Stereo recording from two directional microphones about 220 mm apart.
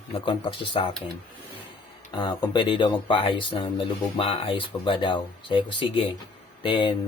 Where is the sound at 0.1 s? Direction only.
20° left (ahead or behind).